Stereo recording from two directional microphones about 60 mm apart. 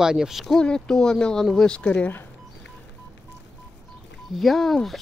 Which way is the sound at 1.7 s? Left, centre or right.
Centre.